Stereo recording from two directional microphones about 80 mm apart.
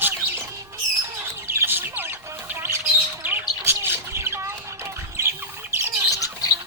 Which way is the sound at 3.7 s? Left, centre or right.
Right.